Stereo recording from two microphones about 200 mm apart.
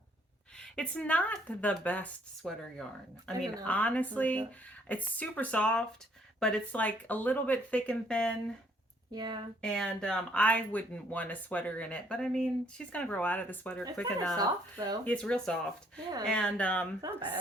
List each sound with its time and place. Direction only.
0.6 s speech: 5° left (ahead or behind)
9.1 s speech: 20° right (ahead or behind)
9.6 s speech: 5° left (ahead or behind)
14.3 s speech: 20° right (ahead or behind)
15.0 s speech: 5° left (ahead or behind)